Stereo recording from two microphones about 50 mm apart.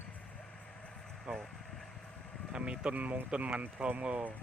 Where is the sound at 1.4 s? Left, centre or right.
Centre.